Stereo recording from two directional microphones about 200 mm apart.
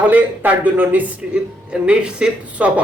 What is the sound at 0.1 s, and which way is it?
A man's voice, 10° right (ahead or behind).